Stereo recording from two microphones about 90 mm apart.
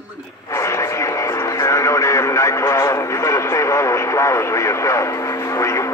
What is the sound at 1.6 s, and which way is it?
Radio, 35° left (ahead or behind).